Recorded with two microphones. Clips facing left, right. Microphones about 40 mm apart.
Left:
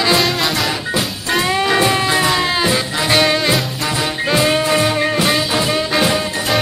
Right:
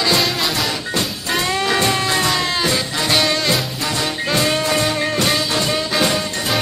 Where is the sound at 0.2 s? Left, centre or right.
Centre.